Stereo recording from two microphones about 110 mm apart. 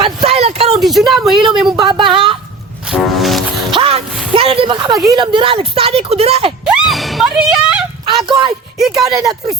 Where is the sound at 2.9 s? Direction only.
Centre (ahead or behind).